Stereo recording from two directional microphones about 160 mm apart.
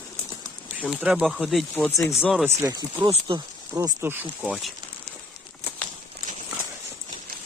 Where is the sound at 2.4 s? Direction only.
20° right (ahead or behind).